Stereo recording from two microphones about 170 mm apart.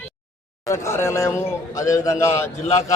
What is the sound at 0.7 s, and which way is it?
A man's voice, 15° left (ahead or behind).